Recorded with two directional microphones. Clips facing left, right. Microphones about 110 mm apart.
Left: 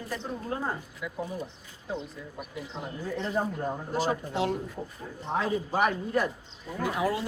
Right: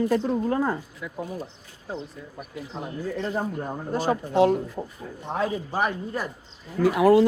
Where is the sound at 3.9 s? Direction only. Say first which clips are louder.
Right 6 dB; 50° right (ahead or behind).